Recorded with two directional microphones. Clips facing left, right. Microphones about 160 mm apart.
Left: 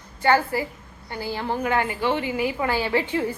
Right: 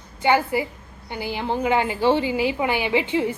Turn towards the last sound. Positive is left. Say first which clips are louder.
# right 2 dB
turn(degrees=-20)  # may be behind; listen again after turning